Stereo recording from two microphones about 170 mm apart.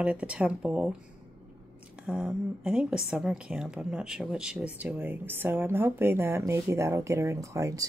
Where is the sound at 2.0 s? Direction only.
5° right (ahead or behind).